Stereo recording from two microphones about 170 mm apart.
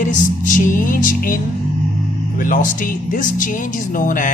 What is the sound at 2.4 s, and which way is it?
Speech, 50° left (ahead or behind).